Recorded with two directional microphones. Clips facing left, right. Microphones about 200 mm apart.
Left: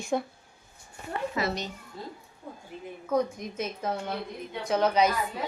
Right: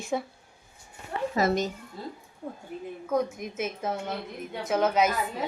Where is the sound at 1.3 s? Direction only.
45° right (ahead or behind).